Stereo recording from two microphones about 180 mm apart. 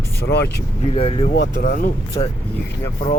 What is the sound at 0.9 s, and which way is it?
Speech, 30° left (ahead or behind).